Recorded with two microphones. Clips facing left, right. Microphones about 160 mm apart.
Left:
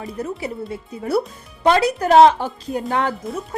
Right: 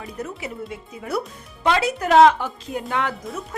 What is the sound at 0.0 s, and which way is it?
Speech, 30° left (ahead or behind).